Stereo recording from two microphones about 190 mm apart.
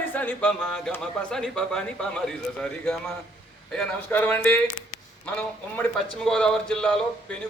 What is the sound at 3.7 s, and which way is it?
Speech, 5° left (ahead or behind).